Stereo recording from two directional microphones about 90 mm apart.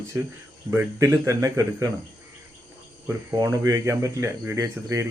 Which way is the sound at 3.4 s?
35° right (ahead or behind).